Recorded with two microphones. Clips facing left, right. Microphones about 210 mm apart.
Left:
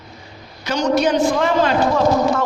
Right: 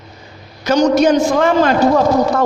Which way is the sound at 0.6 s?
40° right (ahead or behind).